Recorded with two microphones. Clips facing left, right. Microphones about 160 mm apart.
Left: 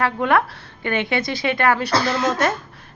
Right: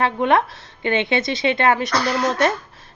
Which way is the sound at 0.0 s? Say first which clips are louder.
Right 1 dB; 20° right (ahead or behind).